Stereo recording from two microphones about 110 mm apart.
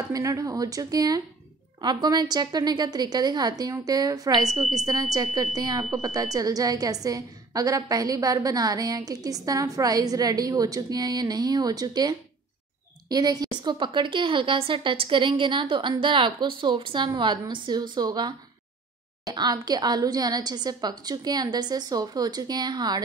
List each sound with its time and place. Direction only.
0.1 s a woman's voice: 30° right (ahead or behind)
19.3 s a woman's voice: 40° right (ahead or behind)